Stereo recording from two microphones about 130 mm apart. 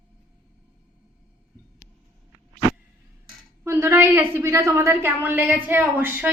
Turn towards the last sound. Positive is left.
turn(degrees=-15)  # may be behind; listen again after turning